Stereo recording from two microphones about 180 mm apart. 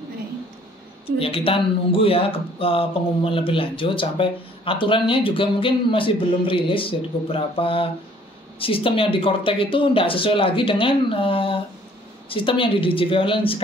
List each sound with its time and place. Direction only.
1.2 s a man's voice: 30° left (ahead or behind)